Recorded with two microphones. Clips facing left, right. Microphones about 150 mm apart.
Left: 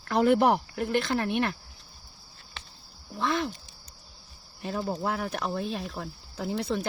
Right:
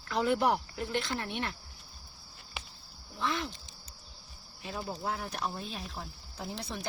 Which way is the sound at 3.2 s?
50° left (ahead or behind).